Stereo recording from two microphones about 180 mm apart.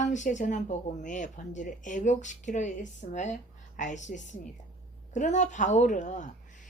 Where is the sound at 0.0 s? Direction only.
45° left (ahead or behind).